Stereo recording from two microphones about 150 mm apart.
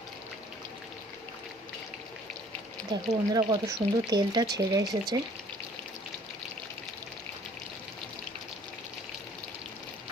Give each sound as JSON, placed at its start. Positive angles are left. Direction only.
{"t": 2.9, "sound": "speech", "side_deg": -25}